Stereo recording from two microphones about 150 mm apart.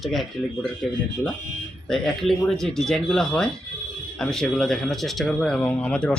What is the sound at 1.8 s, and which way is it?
Speech, centre (ahead or behind).